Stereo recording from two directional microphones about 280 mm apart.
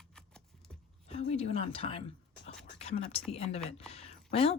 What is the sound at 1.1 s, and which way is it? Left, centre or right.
Speech, left.